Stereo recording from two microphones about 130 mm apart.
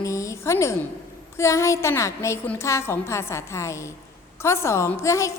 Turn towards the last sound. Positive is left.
turn(degrees=25)  # may be behind; listen again after turning